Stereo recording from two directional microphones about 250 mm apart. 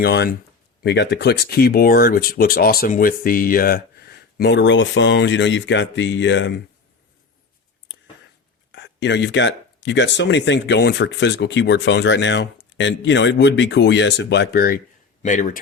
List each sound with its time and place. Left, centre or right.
0.0 s speech: left
8.7 s speech: left